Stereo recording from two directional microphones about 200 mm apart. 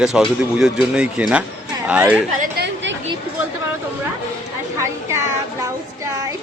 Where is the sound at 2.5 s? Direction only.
60° right (ahead or behind).